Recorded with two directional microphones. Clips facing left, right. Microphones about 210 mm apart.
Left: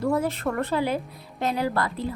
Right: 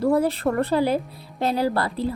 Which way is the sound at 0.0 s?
35° right (ahead or behind).